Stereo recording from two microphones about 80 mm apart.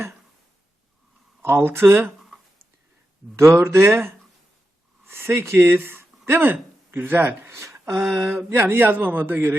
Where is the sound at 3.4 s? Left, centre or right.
Right.